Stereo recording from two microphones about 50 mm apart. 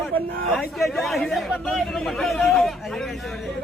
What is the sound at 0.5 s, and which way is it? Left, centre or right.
Speech, centre.